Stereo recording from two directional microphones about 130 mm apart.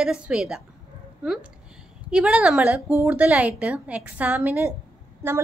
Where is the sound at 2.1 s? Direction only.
10° right (ahead or behind).